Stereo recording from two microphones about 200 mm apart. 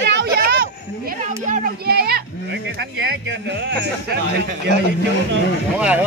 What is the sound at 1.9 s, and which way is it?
Livestock, 50° right (ahead or behind).